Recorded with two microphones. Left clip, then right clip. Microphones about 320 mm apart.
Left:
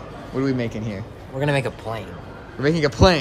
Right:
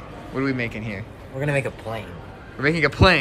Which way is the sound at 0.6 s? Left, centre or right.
Centre.